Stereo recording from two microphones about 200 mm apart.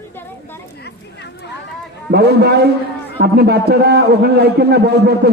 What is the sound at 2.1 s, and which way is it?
A man's voice, 55° right (ahead or behind).